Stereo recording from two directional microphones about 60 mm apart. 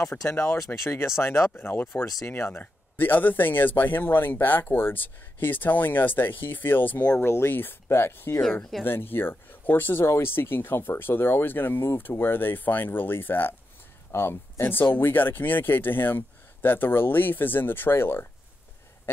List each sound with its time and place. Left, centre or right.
0.3 s speech: left
2.6 s speech: left
7.2 s speech: left
8.4 s speech: centre
8.8 s speech: left